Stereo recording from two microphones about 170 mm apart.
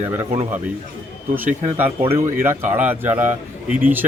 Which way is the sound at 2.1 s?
15° right (ahead or behind).